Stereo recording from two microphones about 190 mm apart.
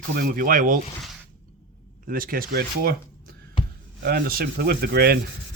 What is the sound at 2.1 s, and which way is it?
Speech, 50° right (ahead or behind).